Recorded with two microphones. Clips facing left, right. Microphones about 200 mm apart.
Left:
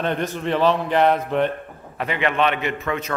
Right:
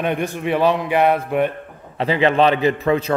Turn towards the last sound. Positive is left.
turn(degrees=-30)  # may be behind; listen again after turning